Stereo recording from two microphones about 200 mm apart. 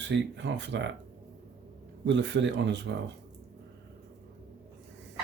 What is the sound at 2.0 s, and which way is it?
Speech, 65° right (ahead or behind).